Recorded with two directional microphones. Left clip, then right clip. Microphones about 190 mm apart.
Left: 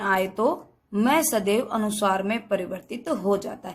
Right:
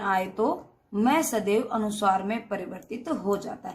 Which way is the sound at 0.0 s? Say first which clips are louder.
Left 3 dB; 40° left (ahead or behind).